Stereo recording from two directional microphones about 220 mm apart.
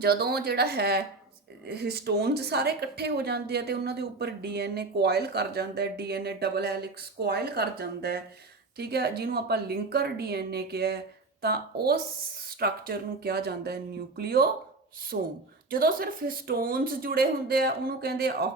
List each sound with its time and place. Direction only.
0.0 s speech: 45° right (ahead or behind)